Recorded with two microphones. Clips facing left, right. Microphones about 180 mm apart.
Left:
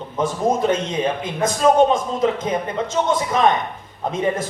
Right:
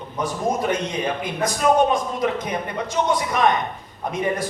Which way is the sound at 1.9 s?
25° left (ahead or behind).